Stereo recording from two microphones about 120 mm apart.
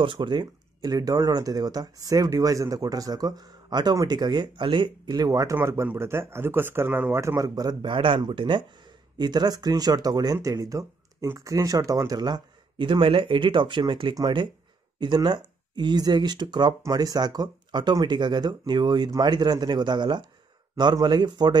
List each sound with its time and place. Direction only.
0.0 s speech: 45° right (ahead or behind)